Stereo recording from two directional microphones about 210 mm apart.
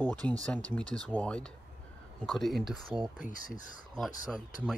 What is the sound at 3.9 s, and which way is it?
Speech, centre (ahead or behind).